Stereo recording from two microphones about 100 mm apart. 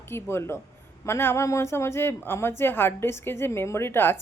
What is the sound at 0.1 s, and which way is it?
Speech, 25° left (ahead or behind).